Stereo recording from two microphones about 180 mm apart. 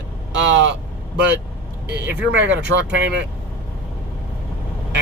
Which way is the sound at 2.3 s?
85° right.